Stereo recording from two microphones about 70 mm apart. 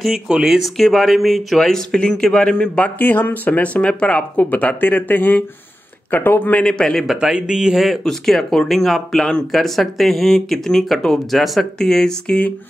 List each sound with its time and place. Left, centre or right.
0.0 s speech: centre
3.0 s speech: left
6.6 s speech: centre
7.1 s speech: centre